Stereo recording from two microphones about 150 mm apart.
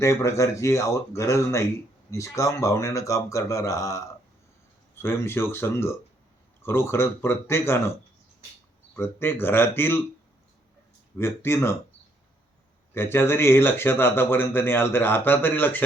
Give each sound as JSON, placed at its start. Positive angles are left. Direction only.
{"t": 0.0, "sound": "speech", "side_deg": 20}
{"t": 9.0, "sound": "speech", "side_deg": 15}
{"t": 11.2, "sound": "speech", "side_deg": 15}
{"t": 12.9, "sound": "speech", "side_deg": 15}